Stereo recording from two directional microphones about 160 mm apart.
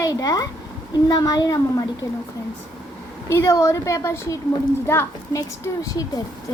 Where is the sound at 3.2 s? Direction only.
15° left (ahead or behind).